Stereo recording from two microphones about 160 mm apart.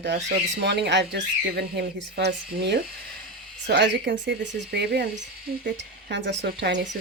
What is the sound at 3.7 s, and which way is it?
Speech, 90° right.